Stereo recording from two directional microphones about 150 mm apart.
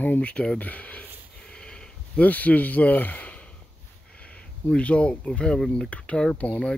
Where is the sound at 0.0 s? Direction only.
10° left (ahead or behind).